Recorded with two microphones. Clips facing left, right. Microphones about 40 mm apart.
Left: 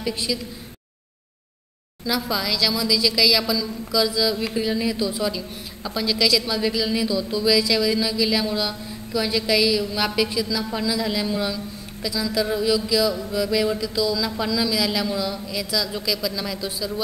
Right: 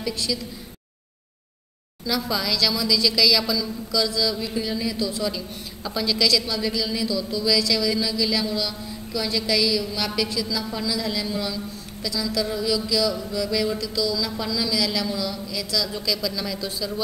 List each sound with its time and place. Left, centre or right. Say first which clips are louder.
0.0 s speech: left 1 dB; centre
2.0 s speech: left 1 dB; centre